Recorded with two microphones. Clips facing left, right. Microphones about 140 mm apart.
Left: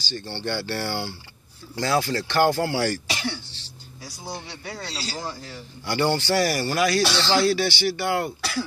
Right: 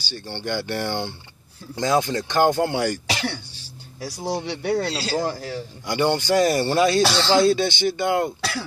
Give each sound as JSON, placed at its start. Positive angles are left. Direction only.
{"t": 0.0, "sound": "speech", "side_deg": -10}
{"t": 3.1, "sound": "throat clearing", "side_deg": -65}
{"t": 4.0, "sound": "speech", "side_deg": -75}
{"t": 5.9, "sound": "speech", "side_deg": -15}